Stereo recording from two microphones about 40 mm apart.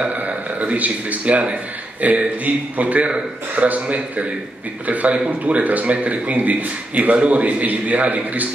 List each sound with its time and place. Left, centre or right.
0.0 s a man's voice: right